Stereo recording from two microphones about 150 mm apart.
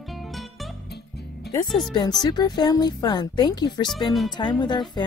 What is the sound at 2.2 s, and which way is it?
Speech, 30° left (ahead or behind).